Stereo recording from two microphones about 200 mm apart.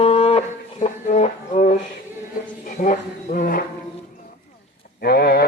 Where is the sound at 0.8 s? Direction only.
35° left (ahead or behind).